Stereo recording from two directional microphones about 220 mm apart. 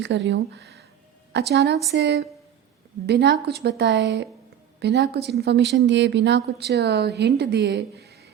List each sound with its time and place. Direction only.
0.0 s speech: 55° right (ahead or behind)